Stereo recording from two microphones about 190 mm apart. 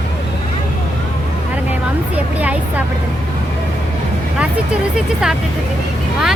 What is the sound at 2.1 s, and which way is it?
Speech, 10° right (ahead or behind).